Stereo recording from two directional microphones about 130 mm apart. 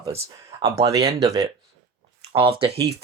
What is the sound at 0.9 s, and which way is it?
Speech, 30° right (ahead or behind).